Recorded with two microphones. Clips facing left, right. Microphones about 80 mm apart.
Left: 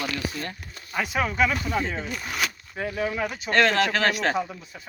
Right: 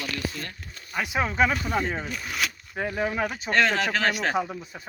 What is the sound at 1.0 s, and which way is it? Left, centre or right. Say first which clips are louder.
Speech: even; centre.